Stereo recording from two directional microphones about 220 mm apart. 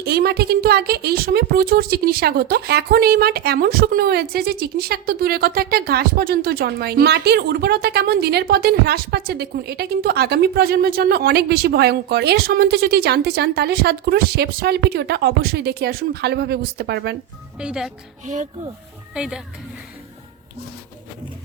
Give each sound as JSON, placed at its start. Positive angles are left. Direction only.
{"t": 0.0, "sound": "a woman's voice", "side_deg": -45}
{"t": 17.6, "sound": "speech", "side_deg": -5}
{"t": 18.3, "sound": "speech", "side_deg": -35}
{"t": 19.1, "sound": "speech", "side_deg": -5}